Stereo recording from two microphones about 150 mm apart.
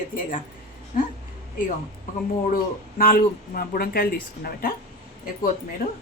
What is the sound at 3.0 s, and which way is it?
Speech, 75° left (ahead or behind).